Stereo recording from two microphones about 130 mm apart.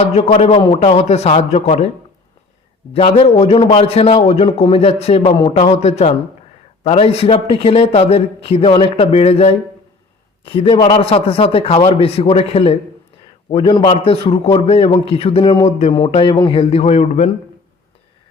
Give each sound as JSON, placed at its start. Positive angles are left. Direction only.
{"t": 0.0, "sound": "a man's voice", "side_deg": 55}
{"t": 2.9, "sound": "a man's voice", "side_deg": 50}